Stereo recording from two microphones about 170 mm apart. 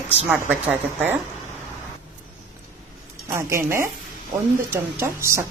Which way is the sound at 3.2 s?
15° right (ahead or behind).